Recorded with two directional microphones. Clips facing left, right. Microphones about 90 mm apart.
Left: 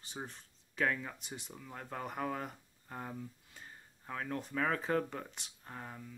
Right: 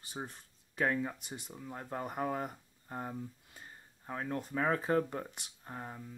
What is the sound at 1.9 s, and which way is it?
Speech, 20° right (ahead or behind).